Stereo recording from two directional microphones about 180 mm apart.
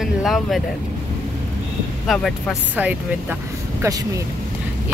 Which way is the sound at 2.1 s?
Centre (ahead or behind).